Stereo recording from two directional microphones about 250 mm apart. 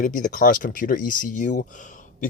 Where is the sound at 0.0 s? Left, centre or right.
Left.